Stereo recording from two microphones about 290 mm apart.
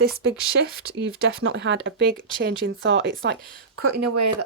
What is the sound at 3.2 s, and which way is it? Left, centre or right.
Speech, right.